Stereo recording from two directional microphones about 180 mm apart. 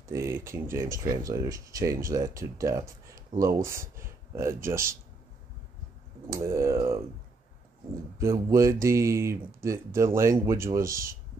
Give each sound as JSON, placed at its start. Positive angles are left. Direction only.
{"t": 0.1, "sound": "speech", "side_deg": -15}
{"t": 6.3, "sound": "speech", "side_deg": -15}
{"t": 8.2, "sound": "speech", "side_deg": -15}